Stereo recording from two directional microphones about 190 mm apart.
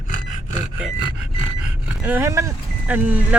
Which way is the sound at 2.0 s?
10° right (ahead or behind).